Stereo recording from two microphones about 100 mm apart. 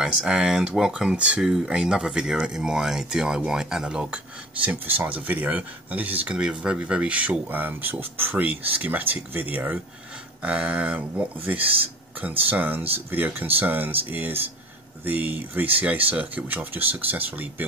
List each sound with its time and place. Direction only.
0.0 s speech: 5° right (ahead or behind)